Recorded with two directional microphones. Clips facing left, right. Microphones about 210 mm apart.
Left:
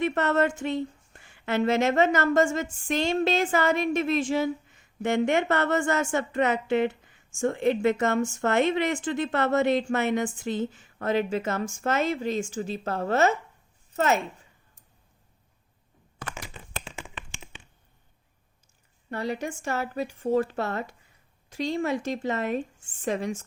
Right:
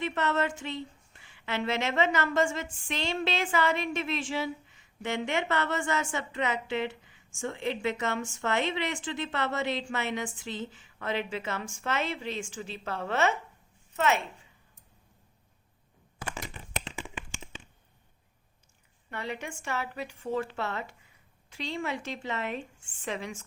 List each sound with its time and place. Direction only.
0.0 s a woman's voice: 50° left (ahead or behind)
19.1 s a woman's voice: 40° left (ahead or behind)